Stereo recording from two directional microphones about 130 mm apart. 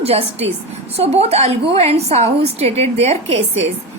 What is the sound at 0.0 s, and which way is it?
A woman's voice, 50° right (ahead or behind).